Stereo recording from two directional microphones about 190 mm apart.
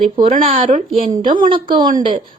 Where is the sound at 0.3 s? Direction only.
40° right (ahead or behind).